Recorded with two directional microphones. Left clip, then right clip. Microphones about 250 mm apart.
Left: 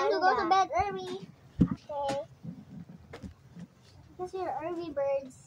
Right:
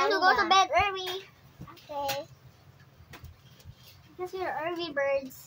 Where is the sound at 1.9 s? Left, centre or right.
Right.